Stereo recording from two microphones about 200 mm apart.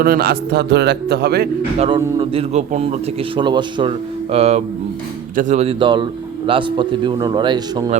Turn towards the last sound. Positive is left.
turn(degrees=-20)  # may be behind; listen again after turning